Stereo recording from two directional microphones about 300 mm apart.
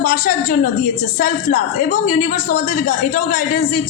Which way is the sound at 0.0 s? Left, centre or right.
Left.